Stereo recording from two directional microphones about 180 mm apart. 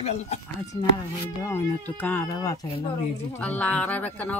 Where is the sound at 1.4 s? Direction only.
10° left (ahead or behind).